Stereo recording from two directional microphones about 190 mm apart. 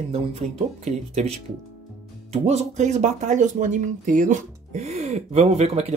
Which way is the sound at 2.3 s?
35° right (ahead or behind).